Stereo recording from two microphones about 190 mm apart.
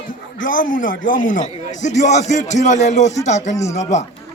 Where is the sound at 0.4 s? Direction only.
45° left (ahead or behind).